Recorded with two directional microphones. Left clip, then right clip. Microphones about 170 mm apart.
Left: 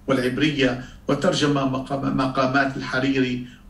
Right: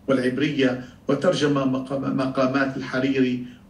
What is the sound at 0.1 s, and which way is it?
A man's voice, 30° left (ahead or behind).